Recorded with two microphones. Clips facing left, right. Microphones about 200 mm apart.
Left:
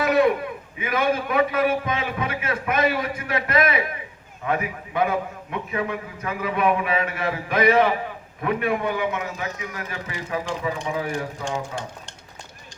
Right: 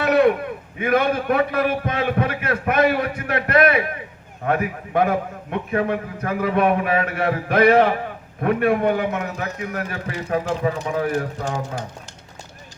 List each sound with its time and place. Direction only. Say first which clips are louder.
0.0 s a man's voice: right 2 dB; 60° right (ahead or behind)
11.4 s speech: right 2 dB; 40° right (ahead or behind)